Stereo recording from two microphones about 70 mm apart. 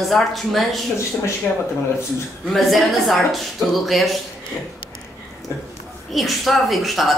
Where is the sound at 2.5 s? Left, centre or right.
Centre.